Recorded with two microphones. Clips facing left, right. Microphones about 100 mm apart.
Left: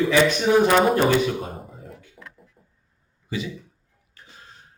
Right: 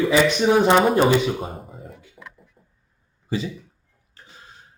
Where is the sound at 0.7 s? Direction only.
Centre (ahead or behind).